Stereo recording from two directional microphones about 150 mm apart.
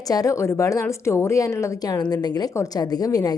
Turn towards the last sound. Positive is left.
turn(degrees=25)  # may be behind; listen again after turning